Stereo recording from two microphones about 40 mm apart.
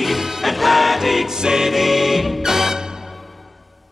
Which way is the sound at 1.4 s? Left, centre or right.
Centre.